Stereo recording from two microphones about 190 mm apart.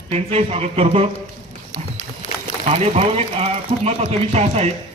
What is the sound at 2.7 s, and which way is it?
A man's voice, 35° right (ahead or behind).